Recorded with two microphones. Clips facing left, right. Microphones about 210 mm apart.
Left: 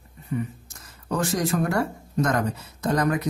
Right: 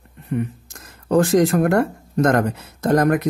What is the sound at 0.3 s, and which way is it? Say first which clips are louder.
Speech: right 5 dB; 65° right (ahead or behind).